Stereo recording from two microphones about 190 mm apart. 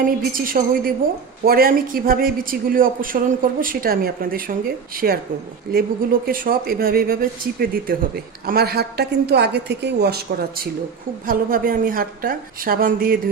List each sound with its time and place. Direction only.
0.0 s speech: 45° right (ahead or behind)
6.2 s speech: 50° right (ahead or behind)